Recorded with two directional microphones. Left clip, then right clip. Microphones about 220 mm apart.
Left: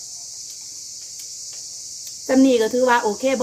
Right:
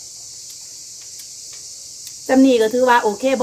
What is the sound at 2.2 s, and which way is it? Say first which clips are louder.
Cricket: right 3 dB; 5° right (ahead or behind).